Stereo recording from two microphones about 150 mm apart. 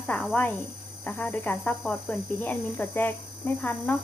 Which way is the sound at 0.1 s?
Centre (ahead or behind).